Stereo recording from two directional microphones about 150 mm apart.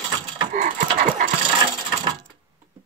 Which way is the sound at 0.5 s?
60° right (ahead or behind).